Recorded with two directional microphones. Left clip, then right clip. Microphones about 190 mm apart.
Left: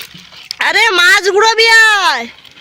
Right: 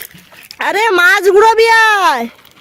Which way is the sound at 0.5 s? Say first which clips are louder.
Left 2 dB; 50° right (ahead or behind).